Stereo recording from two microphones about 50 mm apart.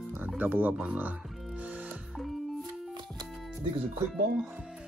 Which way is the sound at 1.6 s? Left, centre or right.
Right.